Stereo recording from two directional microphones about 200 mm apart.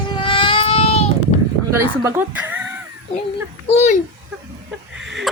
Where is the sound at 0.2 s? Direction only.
25° left (ahead or behind).